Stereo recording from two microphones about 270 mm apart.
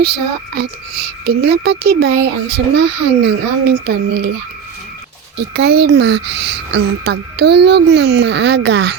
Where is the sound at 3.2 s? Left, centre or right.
Right.